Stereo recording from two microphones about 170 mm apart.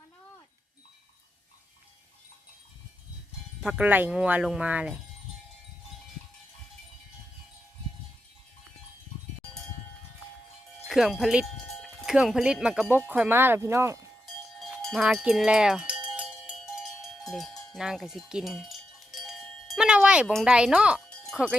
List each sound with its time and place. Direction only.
3.6 s speech: 5° right (ahead or behind)
10.8 s cowbell: centre (ahead or behind)
14.6 s cowbell: centre (ahead or behind)
21.1 s music: 5° left (ahead or behind)